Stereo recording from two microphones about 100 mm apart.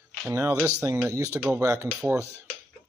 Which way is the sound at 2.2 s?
25° left (ahead or behind).